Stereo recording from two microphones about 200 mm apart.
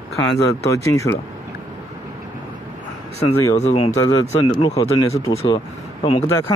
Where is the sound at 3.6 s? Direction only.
30° left (ahead or behind).